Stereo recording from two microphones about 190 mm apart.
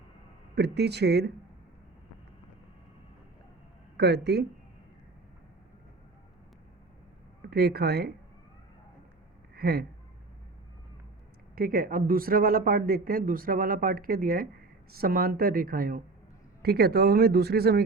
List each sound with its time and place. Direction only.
0.5 s speech: 60° right (ahead or behind)
3.9 s speech: 60° right (ahead or behind)
7.4 s speech: 55° right (ahead or behind)
9.6 s speech: 55° right (ahead or behind)
11.5 s speech: 50° right (ahead or behind)